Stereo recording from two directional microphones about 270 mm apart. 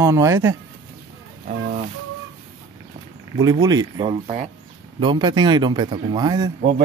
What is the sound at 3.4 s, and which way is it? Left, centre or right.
Speech, centre.